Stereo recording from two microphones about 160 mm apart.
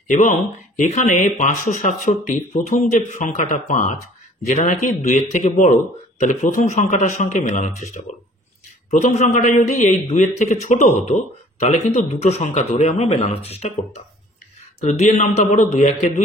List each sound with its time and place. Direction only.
0.1 s speech: 50° left (ahead or behind)
14.8 s speech: 40° left (ahead or behind)